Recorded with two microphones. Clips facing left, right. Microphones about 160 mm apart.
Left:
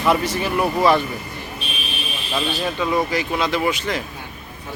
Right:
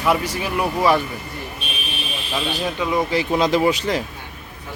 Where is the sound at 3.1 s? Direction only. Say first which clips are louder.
Right 3 dB; 35° right (ahead or behind).